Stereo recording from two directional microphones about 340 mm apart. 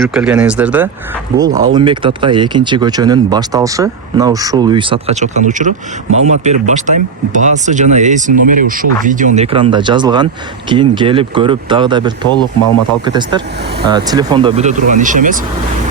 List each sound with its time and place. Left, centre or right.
0.0 s speech: centre; by 15.4 s right